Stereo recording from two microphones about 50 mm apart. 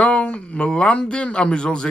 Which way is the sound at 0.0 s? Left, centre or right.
Left.